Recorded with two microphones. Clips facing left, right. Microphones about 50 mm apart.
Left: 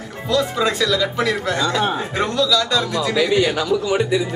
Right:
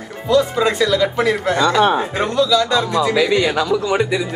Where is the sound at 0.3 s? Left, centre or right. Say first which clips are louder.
Right 4 dB; right.